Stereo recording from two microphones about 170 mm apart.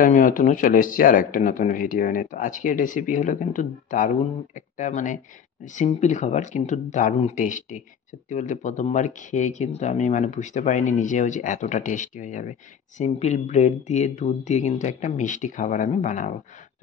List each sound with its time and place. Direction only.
0.0 s speech: 50° left (ahead or behind)